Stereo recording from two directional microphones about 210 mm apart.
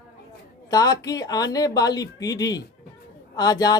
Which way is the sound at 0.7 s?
15° left (ahead or behind).